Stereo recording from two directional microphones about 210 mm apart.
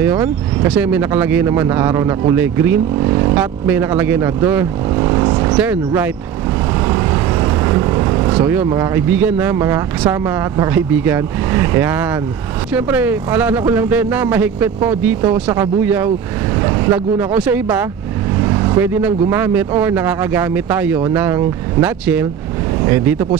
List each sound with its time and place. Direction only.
0.0 s speech: 10° right (ahead or behind)
3.0 s speech: 20° right (ahead or behind)
3.6 s speech: 10° right (ahead or behind)
4.9 s vehicle: 20° right (ahead or behind)
5.6 s speech: 10° right (ahead or behind)
6.9 s vehicle: 20° right (ahead or behind)
8.5 s speech: 10° right (ahead or behind)